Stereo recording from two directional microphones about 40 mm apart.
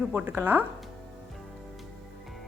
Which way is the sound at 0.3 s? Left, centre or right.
Right.